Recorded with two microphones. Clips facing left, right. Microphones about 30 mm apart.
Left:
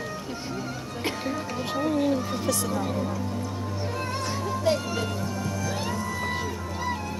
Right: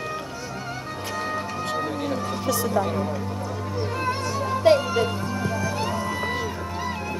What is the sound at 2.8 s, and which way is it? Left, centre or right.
Speech, centre.